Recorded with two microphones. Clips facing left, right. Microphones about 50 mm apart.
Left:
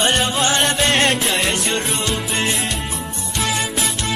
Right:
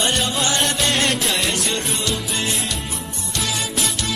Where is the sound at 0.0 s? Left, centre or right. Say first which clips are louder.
Left 3 dB; left.